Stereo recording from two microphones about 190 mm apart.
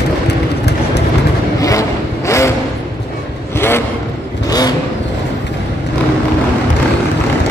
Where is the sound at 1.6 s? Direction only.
15° left (ahead or behind).